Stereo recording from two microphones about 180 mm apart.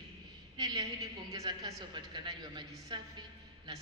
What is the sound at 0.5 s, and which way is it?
A woman's voice, 20° right (ahead or behind).